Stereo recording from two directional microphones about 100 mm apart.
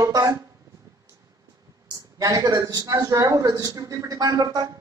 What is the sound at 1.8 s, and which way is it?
A man's voice, 35° right (ahead or behind).